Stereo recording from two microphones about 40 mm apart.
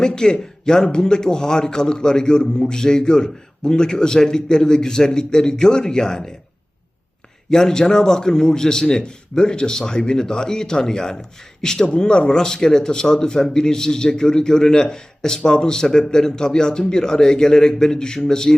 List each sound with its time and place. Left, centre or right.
0.0 s speech: centre
7.5 s speech: centre